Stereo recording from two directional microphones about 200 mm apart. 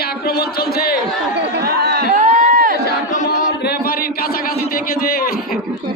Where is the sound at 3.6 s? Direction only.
50° left (ahead or behind).